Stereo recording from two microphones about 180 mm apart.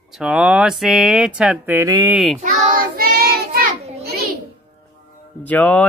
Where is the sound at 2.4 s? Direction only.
50° right (ahead or behind).